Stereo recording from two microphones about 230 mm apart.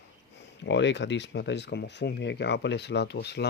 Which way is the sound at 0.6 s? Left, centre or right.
Left.